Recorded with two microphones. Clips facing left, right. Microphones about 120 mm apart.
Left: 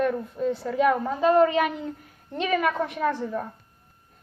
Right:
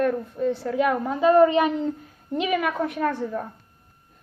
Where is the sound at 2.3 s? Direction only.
5° right (ahead or behind).